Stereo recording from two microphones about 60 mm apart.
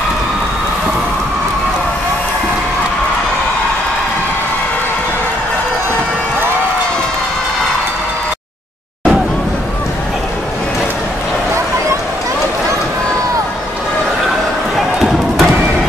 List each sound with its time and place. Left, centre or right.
15.0 s basketball bounce: centre